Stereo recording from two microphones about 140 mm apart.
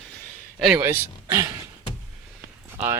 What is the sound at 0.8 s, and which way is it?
Speech, 20° right (ahead or behind).